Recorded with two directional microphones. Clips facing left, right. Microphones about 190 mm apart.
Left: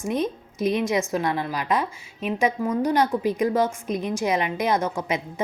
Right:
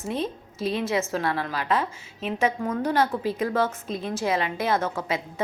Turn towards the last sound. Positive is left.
turn(degrees=15)  # may be behind; listen again after turning